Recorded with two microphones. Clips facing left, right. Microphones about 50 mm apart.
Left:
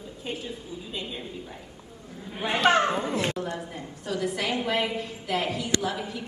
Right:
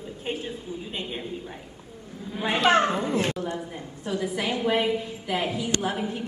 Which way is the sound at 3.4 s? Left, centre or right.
Right.